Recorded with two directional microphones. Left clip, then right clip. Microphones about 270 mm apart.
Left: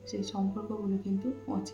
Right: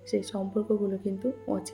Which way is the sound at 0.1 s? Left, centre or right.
Right.